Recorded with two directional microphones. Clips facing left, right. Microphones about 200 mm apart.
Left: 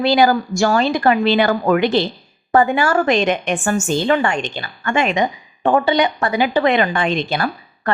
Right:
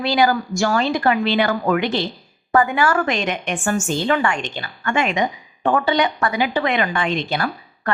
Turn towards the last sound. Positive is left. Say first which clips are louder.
# left 2 dB
turn(degrees=30)  # may be behind; listen again after turning